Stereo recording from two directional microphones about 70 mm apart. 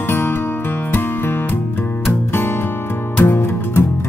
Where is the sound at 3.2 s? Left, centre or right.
Left.